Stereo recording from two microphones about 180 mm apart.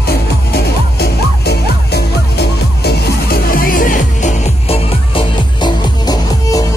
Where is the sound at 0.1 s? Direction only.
60° left (ahead or behind); by 4.7 s 45° left (ahead or behind).